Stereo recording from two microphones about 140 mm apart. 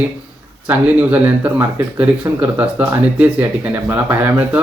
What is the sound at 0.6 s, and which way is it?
Speech, 10° right (ahead or behind).